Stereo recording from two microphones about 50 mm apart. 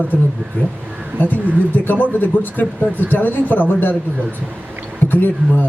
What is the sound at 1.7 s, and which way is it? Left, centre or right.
Speech, left.